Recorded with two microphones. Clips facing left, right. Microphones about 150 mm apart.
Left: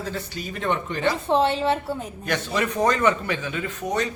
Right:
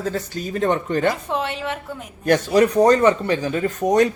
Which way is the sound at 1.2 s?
30° left (ahead or behind).